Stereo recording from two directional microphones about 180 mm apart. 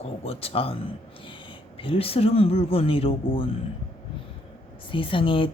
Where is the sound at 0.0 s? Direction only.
35° left (ahead or behind).